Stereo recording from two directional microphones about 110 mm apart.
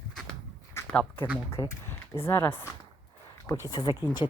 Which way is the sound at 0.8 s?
25° left (ahead or behind).